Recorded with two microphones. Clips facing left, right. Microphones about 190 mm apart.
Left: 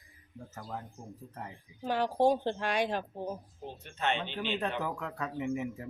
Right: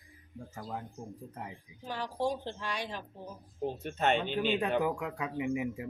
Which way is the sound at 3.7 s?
45° right (ahead or behind).